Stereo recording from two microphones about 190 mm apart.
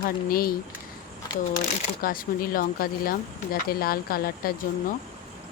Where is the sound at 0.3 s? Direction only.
50° left (ahead or behind).